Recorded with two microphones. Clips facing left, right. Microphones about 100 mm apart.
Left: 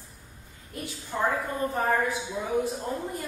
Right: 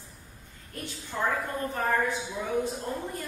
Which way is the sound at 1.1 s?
15° left (ahead or behind).